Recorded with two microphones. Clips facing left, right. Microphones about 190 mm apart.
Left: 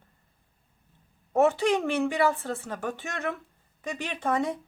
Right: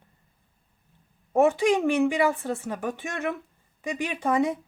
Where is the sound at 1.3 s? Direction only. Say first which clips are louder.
Right 2 dB; 15° right (ahead or behind).